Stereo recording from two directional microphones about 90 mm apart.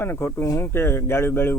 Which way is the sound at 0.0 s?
25° left (ahead or behind).